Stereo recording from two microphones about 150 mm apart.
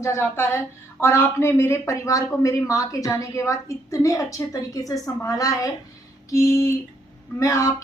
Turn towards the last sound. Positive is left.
turn(degrees=20)  # may be behind; listen again after turning